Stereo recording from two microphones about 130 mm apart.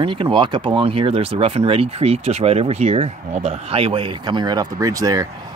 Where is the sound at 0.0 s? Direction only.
40° right (ahead or behind).